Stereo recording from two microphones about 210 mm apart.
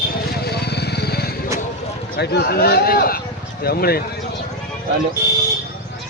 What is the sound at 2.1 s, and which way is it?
A man's voice, 50° left (ahead or behind).